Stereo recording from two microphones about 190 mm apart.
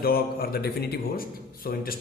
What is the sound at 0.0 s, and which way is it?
Speech, 50° left (ahead or behind).